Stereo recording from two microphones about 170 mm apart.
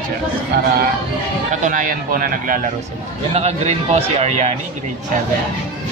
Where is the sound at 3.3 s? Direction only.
40° right (ahead or behind).